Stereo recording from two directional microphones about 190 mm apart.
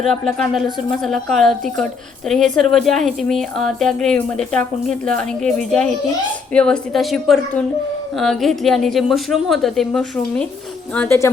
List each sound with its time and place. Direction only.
0.0 s speech: centre (ahead or behind)